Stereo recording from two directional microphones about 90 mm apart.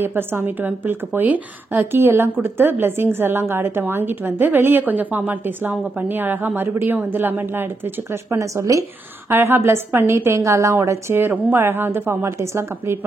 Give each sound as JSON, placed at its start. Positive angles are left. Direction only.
{"t": 0.0, "sound": "a woman's voice", "side_deg": -25}